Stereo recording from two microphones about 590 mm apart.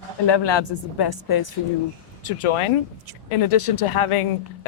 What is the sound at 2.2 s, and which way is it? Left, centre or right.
Speech, left.